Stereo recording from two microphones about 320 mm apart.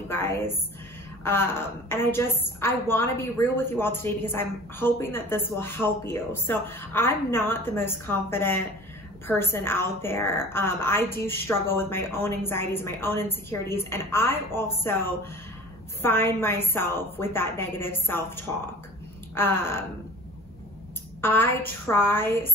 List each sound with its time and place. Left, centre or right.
0.1 s a woman's voice: centre
16.0 s a woman's voice: centre
21.2 s a woman's voice: centre